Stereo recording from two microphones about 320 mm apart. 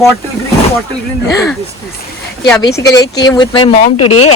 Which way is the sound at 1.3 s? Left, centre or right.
Centre.